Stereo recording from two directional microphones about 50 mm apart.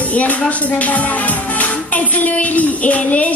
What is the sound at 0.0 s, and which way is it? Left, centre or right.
Speech, left.